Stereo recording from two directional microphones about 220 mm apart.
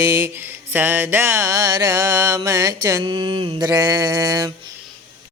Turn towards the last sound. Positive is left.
turn(degrees=-15)  # may be behind; listen again after turning